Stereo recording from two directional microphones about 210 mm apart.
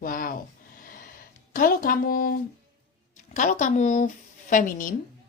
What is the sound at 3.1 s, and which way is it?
A woman's voice, 35° left (ahead or behind).